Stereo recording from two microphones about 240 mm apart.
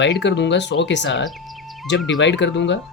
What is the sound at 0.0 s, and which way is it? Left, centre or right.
Speech, left.